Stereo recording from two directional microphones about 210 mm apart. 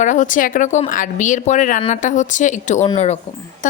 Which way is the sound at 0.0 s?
35° left (ahead or behind).